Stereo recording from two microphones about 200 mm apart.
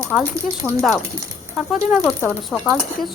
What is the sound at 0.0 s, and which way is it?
Speech, 15° right (ahead or behind).